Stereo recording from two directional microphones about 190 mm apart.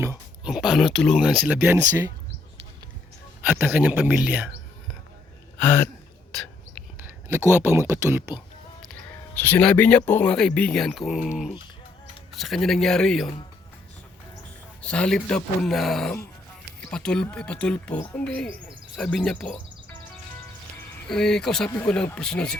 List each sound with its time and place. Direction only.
0.0 s a sound: 10° right (ahead or behind)
0.5 s speech: centre (ahead or behind)
3.5 s speech: 10° right (ahead or behind)
5.5 s speech: 10° left (ahead or behind)
7.0 s speech: 10° right (ahead or behind)
8.9 s speech: 10° left (ahead or behind)
12.4 s speech: centre (ahead or behind)
14.8 s speech: 5° left (ahead or behind)
21.1 s speech: 5° left (ahead or behind)